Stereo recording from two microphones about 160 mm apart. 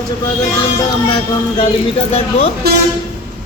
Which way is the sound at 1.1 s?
35° left (ahead or behind).